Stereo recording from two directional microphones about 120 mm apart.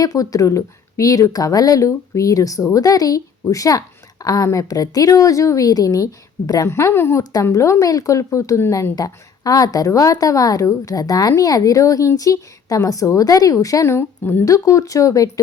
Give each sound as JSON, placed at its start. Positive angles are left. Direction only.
{"t": 0.0, "sound": "a woman's voice", "side_deg": 30}